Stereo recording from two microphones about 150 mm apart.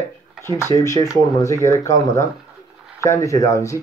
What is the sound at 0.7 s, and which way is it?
Speech, 20° left (ahead or behind).